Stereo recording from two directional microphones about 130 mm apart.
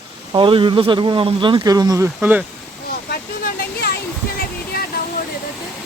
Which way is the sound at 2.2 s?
10° right (ahead or behind).